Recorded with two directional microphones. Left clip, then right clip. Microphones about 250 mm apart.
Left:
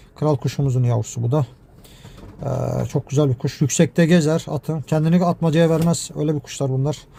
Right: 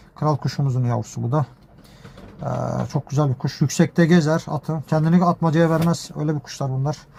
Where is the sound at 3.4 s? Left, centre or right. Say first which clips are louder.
Left 2 dB; left.